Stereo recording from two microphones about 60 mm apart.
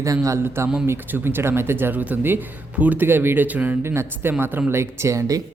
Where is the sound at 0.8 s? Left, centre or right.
Right.